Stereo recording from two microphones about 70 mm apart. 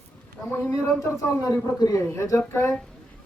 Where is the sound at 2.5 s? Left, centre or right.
Left.